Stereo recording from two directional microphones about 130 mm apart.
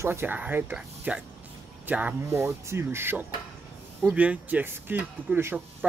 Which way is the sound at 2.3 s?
20° right (ahead or behind).